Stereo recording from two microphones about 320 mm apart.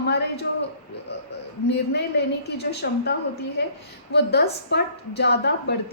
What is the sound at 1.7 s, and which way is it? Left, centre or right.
A woman's voice, left.